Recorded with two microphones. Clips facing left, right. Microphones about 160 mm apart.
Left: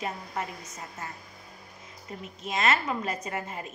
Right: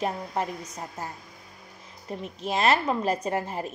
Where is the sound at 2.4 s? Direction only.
35° right (ahead or behind).